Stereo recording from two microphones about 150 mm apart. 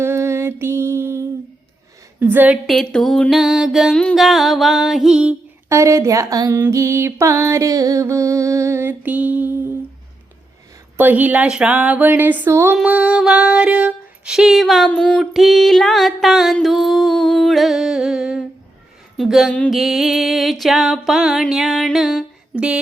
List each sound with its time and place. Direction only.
0.0 s mantra: 15° right (ahead or behind)
2.1 s a woman's voice: 15° right (ahead or behind)
2.6 s music: 5° left (ahead or behind)
5.6 s a sound: 20° right (ahead or behind)
10.9 s female singing: 10° right (ahead or behind)
14.8 s music: 5° left (ahead or behind)